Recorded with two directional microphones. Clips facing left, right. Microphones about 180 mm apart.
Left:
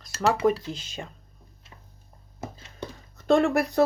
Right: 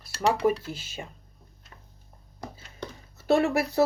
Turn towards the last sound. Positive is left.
turn(degrees=-5)  # may be behind; listen again after turning